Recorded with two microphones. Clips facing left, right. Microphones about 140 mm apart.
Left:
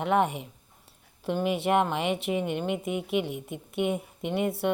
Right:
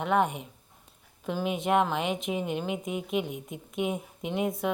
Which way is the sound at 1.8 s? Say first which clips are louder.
Left 1 dB; centre (ahead or behind).